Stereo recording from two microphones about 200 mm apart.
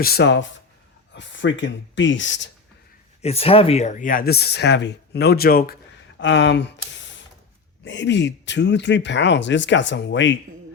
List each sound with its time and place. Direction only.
0.0 s speech: 50° left (ahead or behind)
3.2 s speech: 30° left (ahead or behind); by 5.7 s 50° left (ahead or behind)
6.1 s speech: 65° left (ahead or behind)